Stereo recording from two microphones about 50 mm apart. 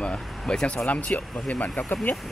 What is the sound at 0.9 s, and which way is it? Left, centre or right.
Speech, left.